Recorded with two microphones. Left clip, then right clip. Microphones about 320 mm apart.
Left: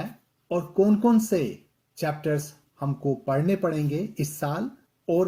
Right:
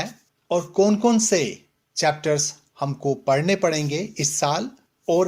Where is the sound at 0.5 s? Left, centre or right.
Right.